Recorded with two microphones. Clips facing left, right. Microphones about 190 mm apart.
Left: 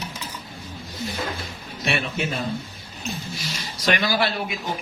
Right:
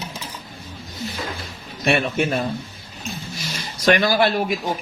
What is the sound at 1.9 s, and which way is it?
Speech, 55° right (ahead or behind).